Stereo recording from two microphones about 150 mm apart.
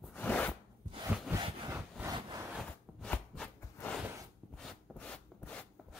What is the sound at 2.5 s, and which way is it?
Zipper, 5° left (ahead or behind).